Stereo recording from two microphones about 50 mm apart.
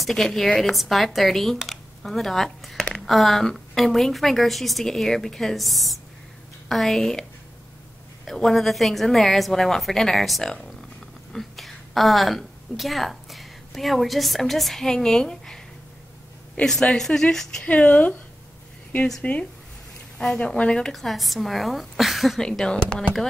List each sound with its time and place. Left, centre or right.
0.0 s a woman's voice: centre
8.4 s a woman's voice: centre
16.6 s a woman's voice: left
16.9 s a woman's voice: centre
17.6 s speech: left
19.2 s speech: left
20.2 s a woman's voice: centre
20.9 s a woman's voice: centre
22.4 s a woman's voice: centre